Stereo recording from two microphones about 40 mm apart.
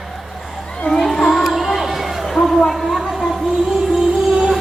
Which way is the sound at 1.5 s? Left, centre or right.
Centre.